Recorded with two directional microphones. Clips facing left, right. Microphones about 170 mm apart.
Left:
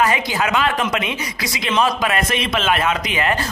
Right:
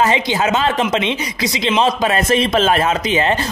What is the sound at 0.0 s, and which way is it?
Speech, 25° right (ahead or behind).